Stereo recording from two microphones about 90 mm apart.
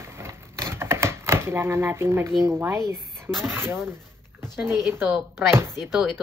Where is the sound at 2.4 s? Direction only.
30° right (ahead or behind).